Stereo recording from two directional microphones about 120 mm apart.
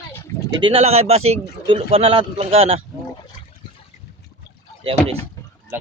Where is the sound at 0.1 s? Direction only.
20° left (ahead or behind).